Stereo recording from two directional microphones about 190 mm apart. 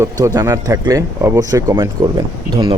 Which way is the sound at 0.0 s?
15° right (ahead or behind).